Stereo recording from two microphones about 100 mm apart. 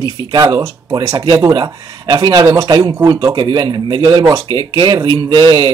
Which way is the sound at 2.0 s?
50° right (ahead or behind).